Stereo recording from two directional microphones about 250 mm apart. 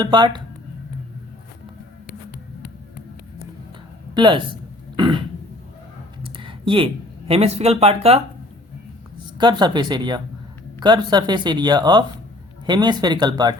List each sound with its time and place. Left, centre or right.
0.0 s speech: centre
4.1 s speech: centre
4.9 s a sound: centre
6.2 s speech: centre
9.4 s speech: centre